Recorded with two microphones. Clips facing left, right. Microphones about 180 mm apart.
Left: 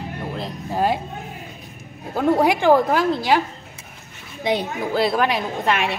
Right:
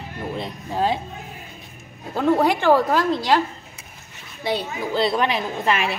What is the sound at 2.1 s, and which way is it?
Speech, 10° left (ahead or behind).